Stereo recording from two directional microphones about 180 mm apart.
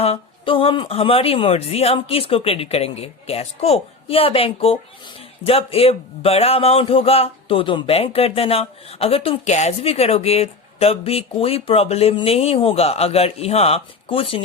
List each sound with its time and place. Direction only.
0.0 s a woman's voice: 30° left (ahead or behind)